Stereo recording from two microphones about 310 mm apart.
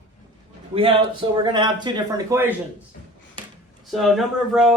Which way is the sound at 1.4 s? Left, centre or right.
Centre.